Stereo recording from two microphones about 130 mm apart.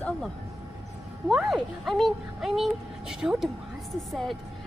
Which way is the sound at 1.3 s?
Centre (ahead or behind).